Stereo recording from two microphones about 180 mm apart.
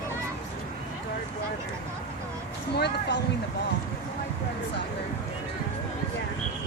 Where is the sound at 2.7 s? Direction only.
70° left (ahead or behind).